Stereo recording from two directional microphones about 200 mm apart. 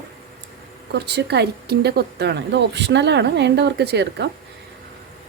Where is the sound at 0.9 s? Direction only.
55° right (ahead or behind).